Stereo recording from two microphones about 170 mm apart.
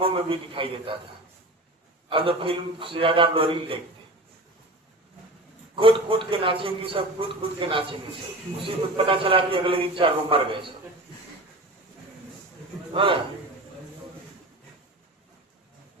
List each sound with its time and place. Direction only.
0.0 s a man's voice: 30° right (ahead or behind)
2.0 s a man's voice: 30° right (ahead or behind)
5.7 s a man's voice: 30° right (ahead or behind)
12.9 s a man's voice: 30° right (ahead or behind)